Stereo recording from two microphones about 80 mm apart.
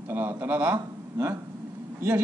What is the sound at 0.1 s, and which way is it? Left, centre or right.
Speech, right.